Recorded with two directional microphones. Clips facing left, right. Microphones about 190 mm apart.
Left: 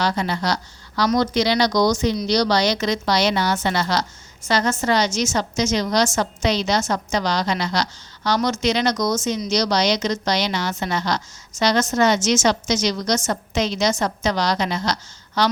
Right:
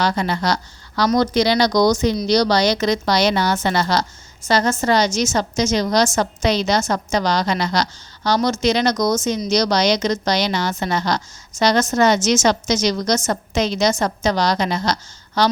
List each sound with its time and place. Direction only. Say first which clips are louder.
0.0 s a woman's voice: right 2 dB; 50° right (ahead or behind)